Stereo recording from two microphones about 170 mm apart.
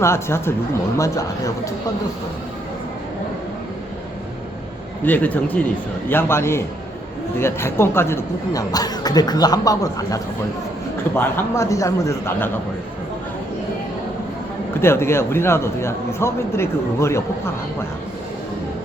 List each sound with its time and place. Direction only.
0.0 s a man's voice: 15° left (ahead or behind)
5.0 s a man's voice: 10° left (ahead or behind)
11.2 s a man's voice: 15° left (ahead or behind)
14.7 s a man's voice: 15° left (ahead or behind)